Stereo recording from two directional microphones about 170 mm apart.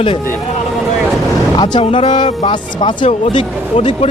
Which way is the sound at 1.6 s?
30° left (ahead or behind).